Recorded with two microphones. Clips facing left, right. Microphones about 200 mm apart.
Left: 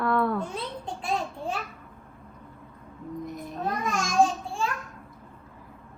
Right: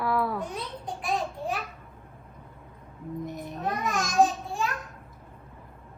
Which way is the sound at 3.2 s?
Centre (ahead or behind).